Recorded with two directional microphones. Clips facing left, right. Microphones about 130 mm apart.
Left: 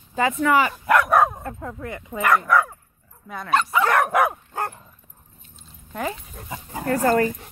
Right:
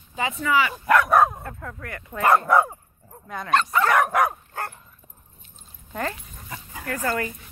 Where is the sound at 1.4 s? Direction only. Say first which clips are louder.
Left 4 dB; 20° left (ahead or behind).